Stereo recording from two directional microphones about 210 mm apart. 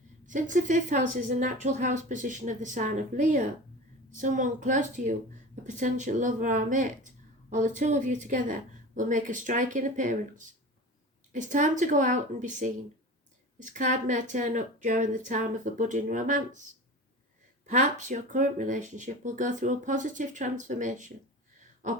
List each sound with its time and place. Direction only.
0.3 s speech: 40° right (ahead or behind)
17.7 s speech: 35° right (ahead or behind)